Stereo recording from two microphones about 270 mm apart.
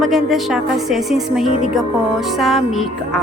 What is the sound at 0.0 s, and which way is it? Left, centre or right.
A woman's voice, centre.